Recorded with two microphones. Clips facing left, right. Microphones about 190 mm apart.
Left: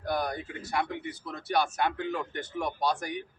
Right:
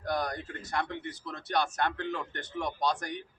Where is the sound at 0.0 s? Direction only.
10° left (ahead or behind).